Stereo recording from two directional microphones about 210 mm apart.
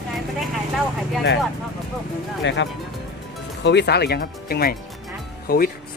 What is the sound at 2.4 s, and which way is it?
Speech, 60° left (ahead or behind).